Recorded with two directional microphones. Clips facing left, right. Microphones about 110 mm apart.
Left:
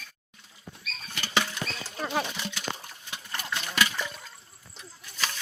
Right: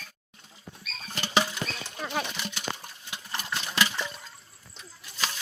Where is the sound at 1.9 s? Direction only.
Centre (ahead or behind).